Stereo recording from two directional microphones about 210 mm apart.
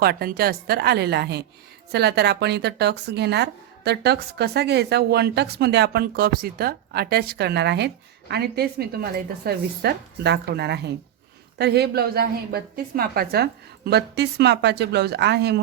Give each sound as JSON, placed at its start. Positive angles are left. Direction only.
{"t": 0.0, "sound": "speech", "side_deg": -50}